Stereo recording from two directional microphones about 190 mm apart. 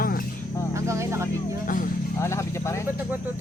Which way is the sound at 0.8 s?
15° right (ahead or behind).